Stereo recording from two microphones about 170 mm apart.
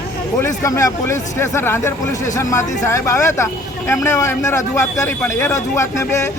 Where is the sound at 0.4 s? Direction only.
20° left (ahead or behind).